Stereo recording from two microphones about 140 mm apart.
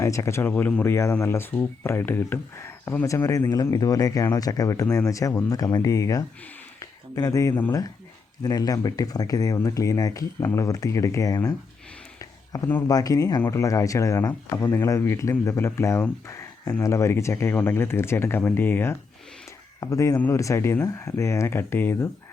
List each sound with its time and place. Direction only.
0.0 s speech: 20° left (ahead or behind)
12.2 s a sound: 20° left (ahead or behind)
12.9 s speech: 25° left (ahead or behind)